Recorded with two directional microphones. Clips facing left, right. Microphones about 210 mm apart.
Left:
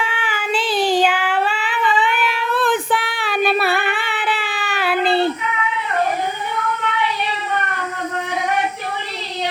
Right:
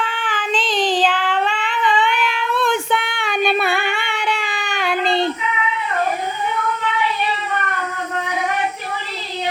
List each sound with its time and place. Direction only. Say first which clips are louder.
0.0 s child singing: even; 10° left (ahead or behind)